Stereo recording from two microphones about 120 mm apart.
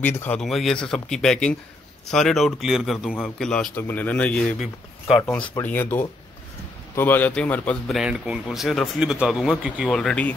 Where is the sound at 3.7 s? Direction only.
15° left (ahead or behind).